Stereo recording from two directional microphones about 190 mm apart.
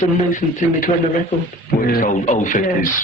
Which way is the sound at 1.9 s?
40° left (ahead or behind).